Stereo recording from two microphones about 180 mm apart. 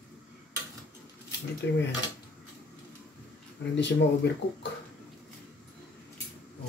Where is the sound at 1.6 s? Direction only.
75° left (ahead or behind).